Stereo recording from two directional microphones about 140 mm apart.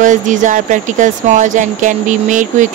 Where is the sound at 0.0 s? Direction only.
65° right (ahead or behind).